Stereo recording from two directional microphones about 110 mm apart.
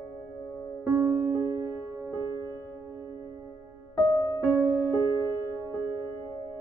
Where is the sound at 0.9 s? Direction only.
20° right (ahead or behind).